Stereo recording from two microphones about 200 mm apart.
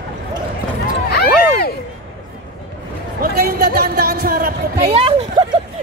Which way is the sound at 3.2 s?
50° right (ahead or behind).